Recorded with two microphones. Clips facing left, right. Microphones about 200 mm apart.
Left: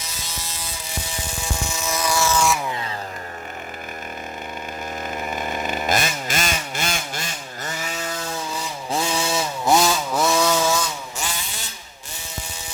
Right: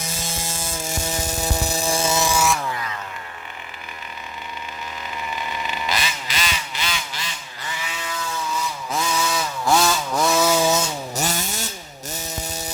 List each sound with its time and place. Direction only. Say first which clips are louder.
0.3 s ratchet: right 5 dB; 50° right (ahead or behind)
1.5 s music: right 3 dB; 35° right (ahead or behind); by 2.4 s 20° right (ahead or behind)
2.6 s chainsaw: even; 25° left (ahead or behind)
5.1 s vehicle: left 2 dB; 50° left (ahead or behind)
8.9 s chainsaw: left 2 dB; 30° left (ahead or behind); by 10.2 s 15° left (ahead or behind)
10.2 s chainsaw: right 1 dB; centre (ahead or behind)
11.2 s chainsaw: right 6 dB; 40° right (ahead or behind)